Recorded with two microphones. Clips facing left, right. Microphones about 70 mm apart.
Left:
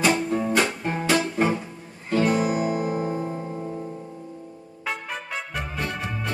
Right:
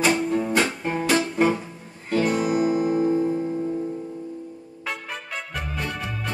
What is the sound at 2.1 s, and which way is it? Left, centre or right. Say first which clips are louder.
Music: even; left.